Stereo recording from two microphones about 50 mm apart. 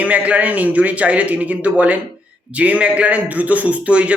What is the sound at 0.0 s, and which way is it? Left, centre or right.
A man's voice, right.